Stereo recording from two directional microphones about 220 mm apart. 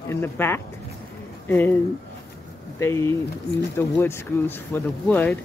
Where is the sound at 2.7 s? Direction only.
10° left (ahead or behind).